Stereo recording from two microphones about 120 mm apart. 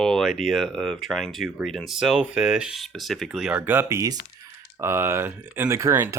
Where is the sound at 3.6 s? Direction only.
20° right (ahead or behind).